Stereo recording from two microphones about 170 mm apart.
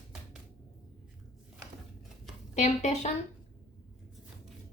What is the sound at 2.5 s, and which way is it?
Speech, 45° left (ahead or behind).